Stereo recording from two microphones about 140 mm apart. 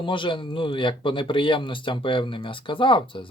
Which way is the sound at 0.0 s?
35° left (ahead or behind).